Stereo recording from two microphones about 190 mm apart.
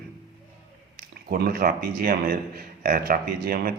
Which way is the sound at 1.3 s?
50° right (ahead or behind).